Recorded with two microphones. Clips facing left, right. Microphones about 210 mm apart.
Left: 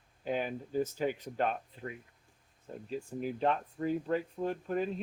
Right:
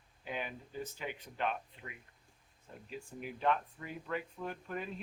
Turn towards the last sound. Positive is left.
turn(degrees=35)  # may be behind; listen again after turning